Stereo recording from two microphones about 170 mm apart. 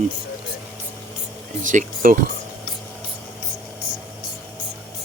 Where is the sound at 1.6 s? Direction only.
50° right (ahead or behind).